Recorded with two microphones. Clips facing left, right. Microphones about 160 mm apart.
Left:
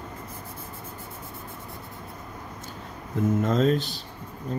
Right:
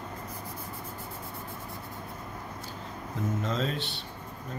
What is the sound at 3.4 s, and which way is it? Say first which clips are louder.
Speech: left 9 dB; 45° left (ahead or behind).